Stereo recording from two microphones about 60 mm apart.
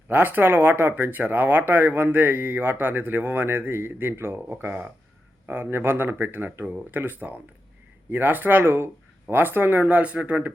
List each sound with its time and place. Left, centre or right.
0.1 s speech: right